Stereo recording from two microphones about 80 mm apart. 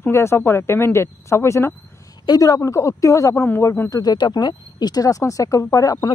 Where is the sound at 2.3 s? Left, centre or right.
Left.